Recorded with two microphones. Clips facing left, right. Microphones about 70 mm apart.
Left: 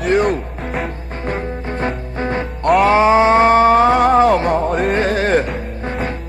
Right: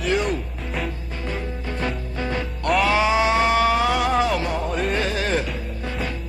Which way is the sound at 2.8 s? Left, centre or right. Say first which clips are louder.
Left 8 dB; left.